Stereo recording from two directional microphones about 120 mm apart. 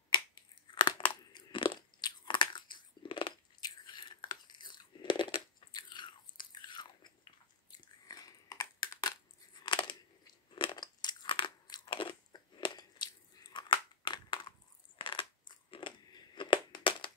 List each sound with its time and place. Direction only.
0.7 s crunch: 40° left (ahead or behind)
8.1 s a sound: 30° left (ahead or behind)
9.6 s crunch: 40° left (ahead or behind)
15.0 s crushing: 40° left (ahead or behind)